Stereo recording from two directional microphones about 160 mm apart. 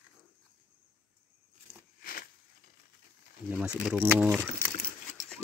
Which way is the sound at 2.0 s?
65° left (ahead or behind).